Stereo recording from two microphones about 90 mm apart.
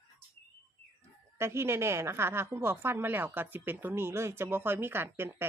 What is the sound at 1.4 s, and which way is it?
A woman's voice, 30° right (ahead or behind).